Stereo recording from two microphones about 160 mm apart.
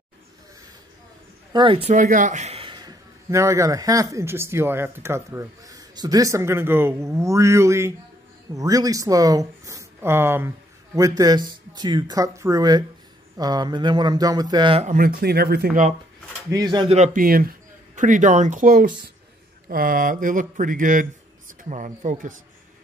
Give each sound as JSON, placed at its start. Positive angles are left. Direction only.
{"t": 1.5, "sound": "speech", "side_deg": -30}
{"t": 1.9, "sound": "a man's voice", "side_deg": -55}
{"t": 14.9, "sound": "speech", "side_deg": -65}
{"t": 16.4, "sound": "a man's voice", "side_deg": -25}
{"t": 16.9, "sound": "a man's voice", "side_deg": -50}